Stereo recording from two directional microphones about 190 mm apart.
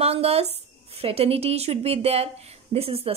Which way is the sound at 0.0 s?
30° right (ahead or behind).